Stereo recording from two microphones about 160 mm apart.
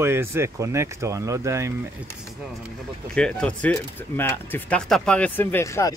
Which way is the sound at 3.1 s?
5° left (ahead or behind).